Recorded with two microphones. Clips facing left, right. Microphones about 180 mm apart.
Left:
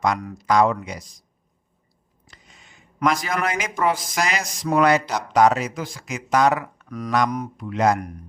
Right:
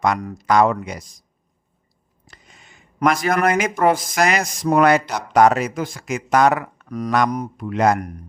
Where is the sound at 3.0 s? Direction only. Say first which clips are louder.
Right 5 dB; 55° right (ahead or behind).